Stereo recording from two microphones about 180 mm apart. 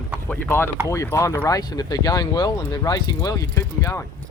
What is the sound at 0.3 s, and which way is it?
Speech, 10° left (ahead or behind).